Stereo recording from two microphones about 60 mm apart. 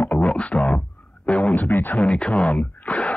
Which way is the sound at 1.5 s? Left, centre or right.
Left.